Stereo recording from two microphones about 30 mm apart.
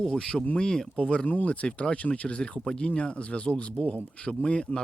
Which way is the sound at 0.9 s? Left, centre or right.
Left.